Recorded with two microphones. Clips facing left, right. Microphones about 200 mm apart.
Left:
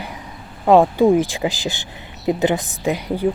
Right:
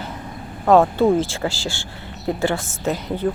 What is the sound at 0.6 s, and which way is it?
A woman's voice, 15° left (ahead or behind).